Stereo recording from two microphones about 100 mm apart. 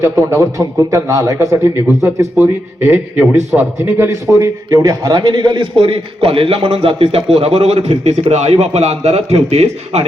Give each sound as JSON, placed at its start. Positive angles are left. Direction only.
{"t": 0.0, "sound": "a man's voice", "side_deg": -30}
{"t": 5.8, "sound": "a man's voice", "side_deg": -80}